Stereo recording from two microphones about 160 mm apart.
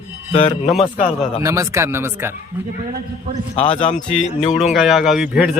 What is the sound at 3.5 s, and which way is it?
Speech, 35° left (ahead or behind).